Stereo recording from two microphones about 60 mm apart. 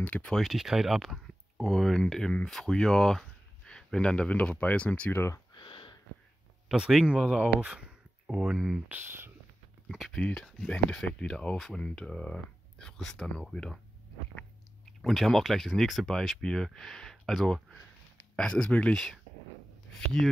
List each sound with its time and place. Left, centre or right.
0.0 s speech: left
0.4 s speech: centre; by 5.1 s left
6.7 s speech: centre
7.1 s speech: centre
8.8 s speech: right
9.8 s speech: centre
10.1 s speech: centre
15.0 s speech: centre
18.3 s speech: centre